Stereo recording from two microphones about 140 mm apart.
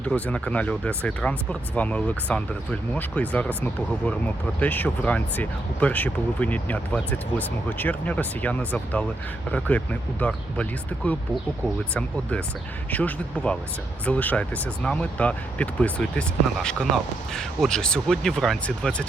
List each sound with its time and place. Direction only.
0.0 s speech: 10° left (ahead or behind)
12.9 s speech: 10° left (ahead or behind)